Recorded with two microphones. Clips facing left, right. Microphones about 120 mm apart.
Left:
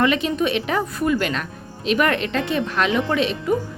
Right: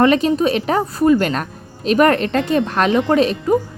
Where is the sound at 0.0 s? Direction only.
40° right (ahead or behind).